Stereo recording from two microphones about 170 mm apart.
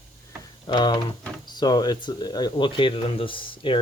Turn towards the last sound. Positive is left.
turn(degrees=30)  # may be behind; listen again after turning